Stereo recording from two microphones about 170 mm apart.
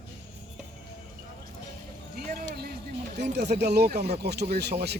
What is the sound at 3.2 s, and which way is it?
Speech, 80° right.